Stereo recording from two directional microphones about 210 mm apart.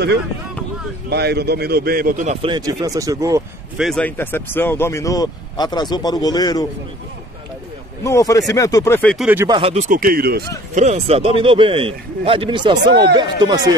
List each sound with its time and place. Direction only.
1.1 s a man's voice: 50° right (ahead or behind)
2.4 s speech: 20° right (ahead or behind)
3.7 s speech: centre (ahead or behind); by 6.7 s 20° left (ahead or behind)
8.0 s speech: 15° left (ahead or behind); by 9.5 s 5° right (ahead or behind)
9.5 s speech: 25° right (ahead or behind); by 10.4 s 45° right (ahead or behind)
10.7 s a man's voice: 35° right (ahead or behind)